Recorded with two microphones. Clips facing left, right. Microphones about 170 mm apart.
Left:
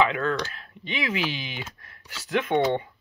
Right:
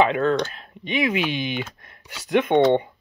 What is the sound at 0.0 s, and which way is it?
Speech, 20° right (ahead or behind).